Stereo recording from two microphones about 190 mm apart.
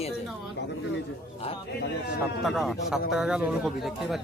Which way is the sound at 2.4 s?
Centre (ahead or behind).